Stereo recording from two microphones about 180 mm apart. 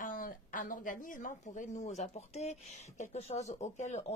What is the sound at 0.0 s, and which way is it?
A woman's voice, 50° left (ahead or behind).